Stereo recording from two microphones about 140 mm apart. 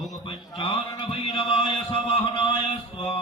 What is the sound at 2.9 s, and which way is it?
Music, 40° left (ahead or behind).